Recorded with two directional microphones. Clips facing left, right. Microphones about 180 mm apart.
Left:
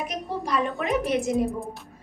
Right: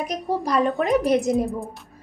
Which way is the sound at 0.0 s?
35° right (ahead or behind).